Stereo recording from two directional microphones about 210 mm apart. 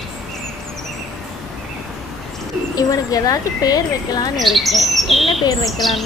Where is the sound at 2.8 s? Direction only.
15° left (ahead or behind).